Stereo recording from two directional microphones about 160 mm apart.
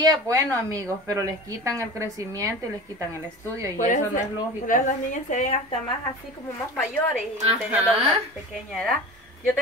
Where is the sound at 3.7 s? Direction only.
55° left (ahead or behind).